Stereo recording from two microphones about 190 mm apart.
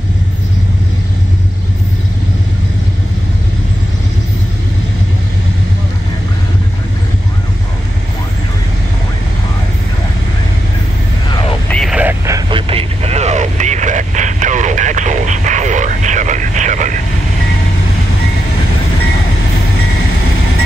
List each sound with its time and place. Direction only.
11.2 s vehicle: 25° left (ahead or behind)
11.7 s vehicle: centre (ahead or behind); by 17.0 s 40° right (ahead or behind)